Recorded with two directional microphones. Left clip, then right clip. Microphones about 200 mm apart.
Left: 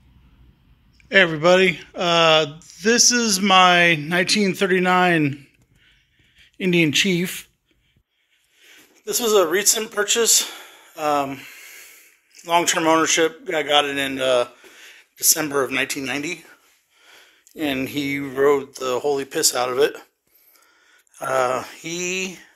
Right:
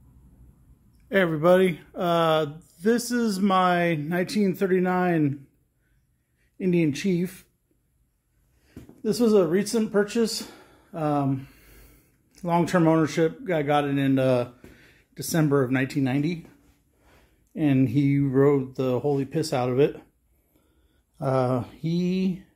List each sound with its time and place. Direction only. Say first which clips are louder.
1.0 s a sound: left 7 dB; 15° right (ahead or behind)
1.4 s speech: left 4 dB; 20° right (ahead or behind)
6.6 s speech: left 7 dB; centre (ahead or behind)
9.0 s speech: left 3 dB; 10° left (ahead or behind)
17.6 s speech: even; 10° left (ahead or behind)
21.3 s speech: left 4 dB; centre (ahead or behind)